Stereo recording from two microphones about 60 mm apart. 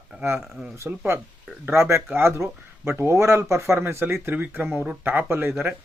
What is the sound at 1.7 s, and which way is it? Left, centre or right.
Speech, right.